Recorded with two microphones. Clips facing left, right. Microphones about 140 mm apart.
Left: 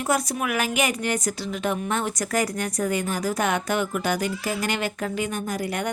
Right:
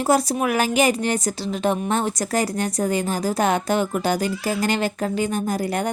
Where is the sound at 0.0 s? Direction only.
30° right (ahead or behind).